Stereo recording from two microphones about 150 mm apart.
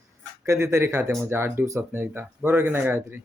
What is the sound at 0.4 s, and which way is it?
Speech, 20° right (ahead or behind).